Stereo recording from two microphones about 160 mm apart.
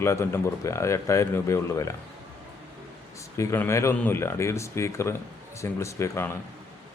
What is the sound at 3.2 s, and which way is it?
A man's voice, 20° left (ahead or behind).